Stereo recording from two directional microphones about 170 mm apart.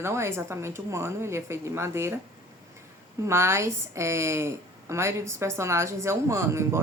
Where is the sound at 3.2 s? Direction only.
15° right (ahead or behind).